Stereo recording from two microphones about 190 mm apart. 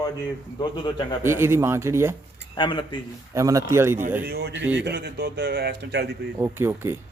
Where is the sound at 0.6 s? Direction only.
25° left (ahead or behind).